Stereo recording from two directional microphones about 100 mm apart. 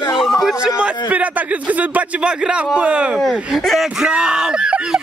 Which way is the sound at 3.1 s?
Centre (ahead or behind).